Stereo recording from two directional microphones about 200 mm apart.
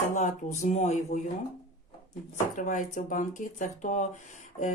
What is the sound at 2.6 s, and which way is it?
Speech, 40° left (ahead or behind).